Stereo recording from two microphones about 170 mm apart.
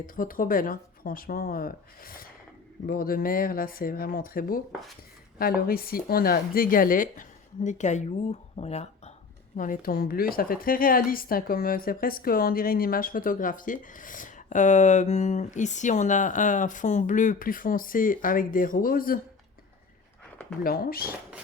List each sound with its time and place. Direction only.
0.0 s speech: 55° left (ahead or behind)
9.6 s speech: 55° left (ahead or behind)
20.7 s speech: 60° left (ahead or behind)